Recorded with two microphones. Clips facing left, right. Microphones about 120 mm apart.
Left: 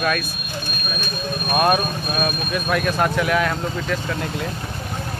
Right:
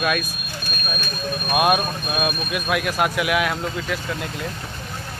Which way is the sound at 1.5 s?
10° right (ahead or behind).